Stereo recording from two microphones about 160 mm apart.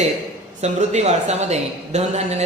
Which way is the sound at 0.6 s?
45° right (ahead or behind).